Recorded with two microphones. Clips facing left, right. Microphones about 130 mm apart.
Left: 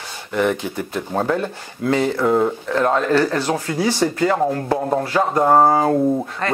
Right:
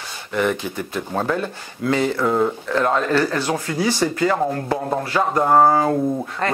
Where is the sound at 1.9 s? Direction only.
25° left (ahead or behind).